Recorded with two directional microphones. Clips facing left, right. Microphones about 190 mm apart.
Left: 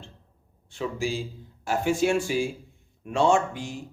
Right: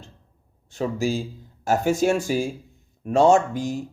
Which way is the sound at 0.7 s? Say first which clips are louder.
Right 5 dB; 40° right (ahead or behind).